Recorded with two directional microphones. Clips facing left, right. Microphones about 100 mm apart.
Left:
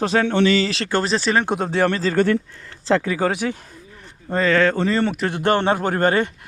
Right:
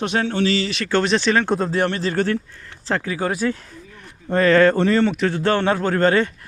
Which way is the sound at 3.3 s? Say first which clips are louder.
Right 2 dB; 15° left (ahead or behind).